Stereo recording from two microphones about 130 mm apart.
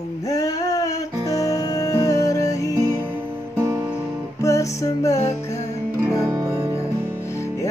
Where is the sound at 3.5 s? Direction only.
25° right (ahead or behind).